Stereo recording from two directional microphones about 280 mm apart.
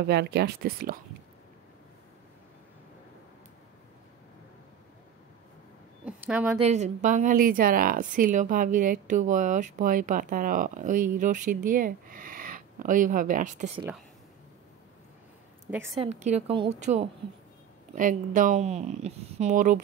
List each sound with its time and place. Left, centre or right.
0.0 s speech: right
6.0 s a sound: centre
6.6 s speech: right
16.0 s speech: right